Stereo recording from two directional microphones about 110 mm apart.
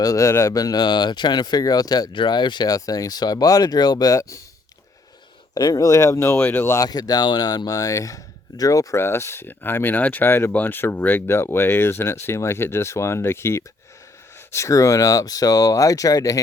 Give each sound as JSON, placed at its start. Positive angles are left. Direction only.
{"t": 0.0, "sound": "speech", "side_deg": 30}
{"t": 5.5, "sound": "speech", "side_deg": 35}
{"t": 6.8, "sound": "speech", "side_deg": 35}